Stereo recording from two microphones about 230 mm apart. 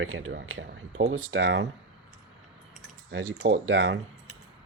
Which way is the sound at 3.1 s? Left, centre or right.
Right.